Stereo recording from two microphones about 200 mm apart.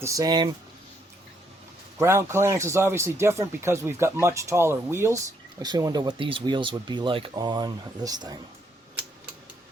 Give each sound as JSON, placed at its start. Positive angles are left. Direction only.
{"t": 0.0, "sound": "speech", "side_deg": -15}
{"t": 2.0, "sound": "speech", "side_deg": -15}